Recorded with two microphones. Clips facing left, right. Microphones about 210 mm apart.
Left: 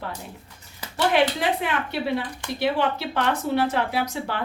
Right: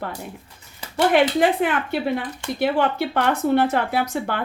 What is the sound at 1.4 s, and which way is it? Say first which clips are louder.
A woman's voice: right 6 dB; 50° right (ahead or behind).